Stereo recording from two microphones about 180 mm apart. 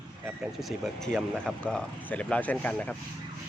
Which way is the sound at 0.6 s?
Centre (ahead or behind).